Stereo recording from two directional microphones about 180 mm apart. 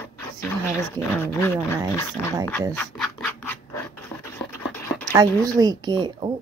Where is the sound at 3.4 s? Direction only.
10° left (ahead or behind).